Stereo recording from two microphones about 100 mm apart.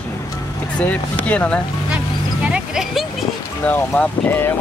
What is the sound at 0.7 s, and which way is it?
Speech, 15° left (ahead or behind).